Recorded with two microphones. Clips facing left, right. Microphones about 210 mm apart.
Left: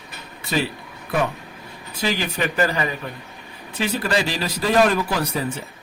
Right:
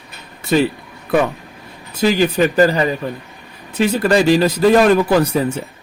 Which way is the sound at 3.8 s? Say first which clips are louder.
Right 8 dB; 50° right (ahead or behind).